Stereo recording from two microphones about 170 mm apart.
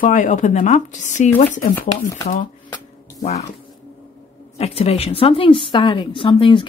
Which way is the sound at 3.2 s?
45° left (ahead or behind).